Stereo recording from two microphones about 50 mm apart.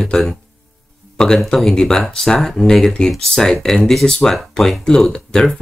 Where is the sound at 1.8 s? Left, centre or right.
Centre.